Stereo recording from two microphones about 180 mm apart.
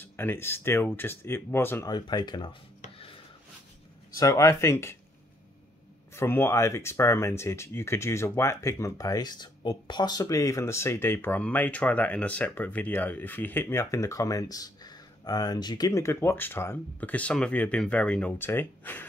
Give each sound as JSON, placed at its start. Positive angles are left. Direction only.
{"t": 0.0, "sound": "speech", "side_deg": 10}
{"t": 4.1, "sound": "speech", "side_deg": 20}
{"t": 6.1, "sound": "speech", "side_deg": 15}